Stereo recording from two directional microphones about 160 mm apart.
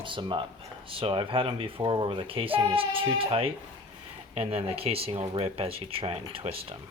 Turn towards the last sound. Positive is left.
turn(degrees=-35)  # may be behind; listen again after turning